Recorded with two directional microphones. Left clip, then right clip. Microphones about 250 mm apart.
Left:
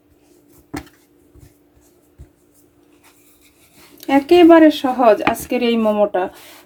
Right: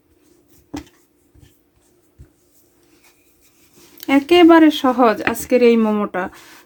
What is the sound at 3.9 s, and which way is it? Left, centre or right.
Speech, right.